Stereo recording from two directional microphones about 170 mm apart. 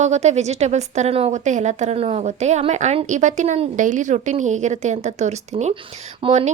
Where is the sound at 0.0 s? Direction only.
40° right (ahead or behind).